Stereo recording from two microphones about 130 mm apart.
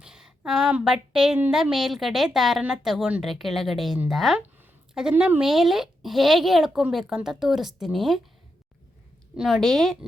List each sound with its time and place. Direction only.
0.0 s a woman's voice: 5° right (ahead or behind)
9.3 s a woman's voice: 5° right (ahead or behind)